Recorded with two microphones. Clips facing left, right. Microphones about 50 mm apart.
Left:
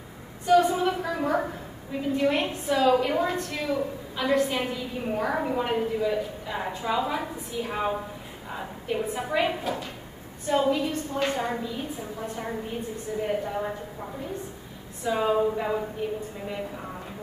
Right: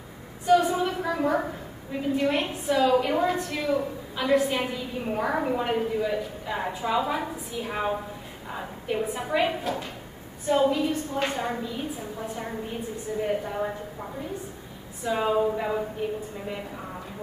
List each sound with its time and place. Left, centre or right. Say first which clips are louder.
0.6 s a sound: left 2 dB; centre
1.9 s a woman's voice: even; centre
15.0 s a woman's voice: even; centre